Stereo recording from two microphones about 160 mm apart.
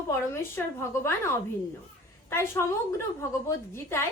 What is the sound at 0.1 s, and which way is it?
A woman's voice, 15° left (ahead or behind).